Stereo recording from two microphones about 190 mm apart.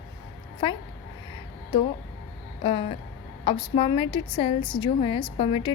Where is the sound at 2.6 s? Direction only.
30° left (ahead or behind).